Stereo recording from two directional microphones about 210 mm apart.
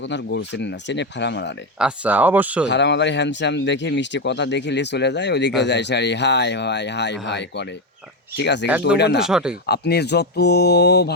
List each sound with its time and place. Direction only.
0.0 s speech: 55° left (ahead or behind)
1.8 s speech: 10° right (ahead or behind)
2.6 s speech: 55° left (ahead or behind)
9.2 s speech: 5° right (ahead or behind)
9.6 s speech: 50° left (ahead or behind)